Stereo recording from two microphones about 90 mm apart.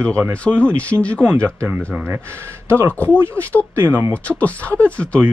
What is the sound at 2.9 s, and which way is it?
Speech, 15° left (ahead or behind).